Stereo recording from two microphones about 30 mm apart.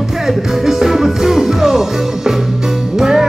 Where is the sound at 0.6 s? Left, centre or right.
Centre.